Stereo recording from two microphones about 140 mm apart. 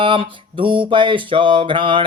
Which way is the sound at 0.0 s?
35° right (ahead or behind).